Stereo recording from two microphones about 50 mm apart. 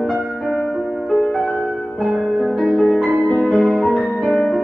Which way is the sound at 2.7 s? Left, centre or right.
Centre.